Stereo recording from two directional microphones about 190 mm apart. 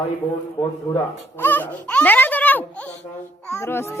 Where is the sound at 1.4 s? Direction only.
10° left (ahead or behind).